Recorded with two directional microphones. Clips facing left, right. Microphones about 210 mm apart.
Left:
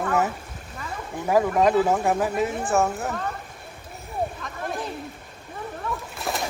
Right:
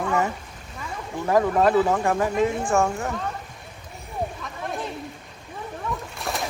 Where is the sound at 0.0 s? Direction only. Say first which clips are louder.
Even; 5° left (ahead or behind).